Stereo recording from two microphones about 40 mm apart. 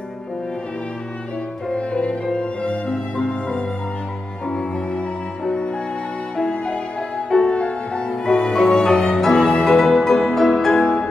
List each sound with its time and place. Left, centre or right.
1.7 s music: left